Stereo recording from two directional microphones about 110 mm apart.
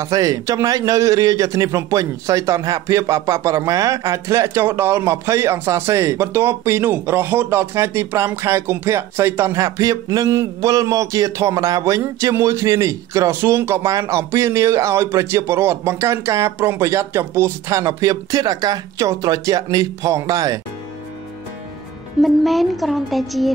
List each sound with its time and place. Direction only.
0.0 s speech: 30° right (ahead or behind)
22.2 s a woman's voice: centre (ahead or behind)